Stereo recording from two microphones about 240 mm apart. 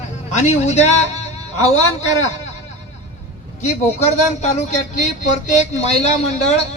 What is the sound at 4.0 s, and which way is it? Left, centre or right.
A man's voice, left.